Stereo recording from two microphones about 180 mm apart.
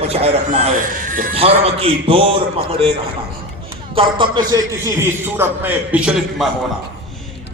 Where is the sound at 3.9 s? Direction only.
30° right (ahead or behind).